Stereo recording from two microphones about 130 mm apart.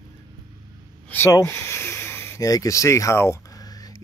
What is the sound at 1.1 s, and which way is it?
Speech, 20° left (ahead or behind).